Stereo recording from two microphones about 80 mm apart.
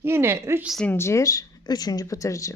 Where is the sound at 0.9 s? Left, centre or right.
Left.